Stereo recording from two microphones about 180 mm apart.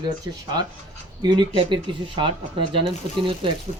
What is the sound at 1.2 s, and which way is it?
Speech, 25° right (ahead or behind).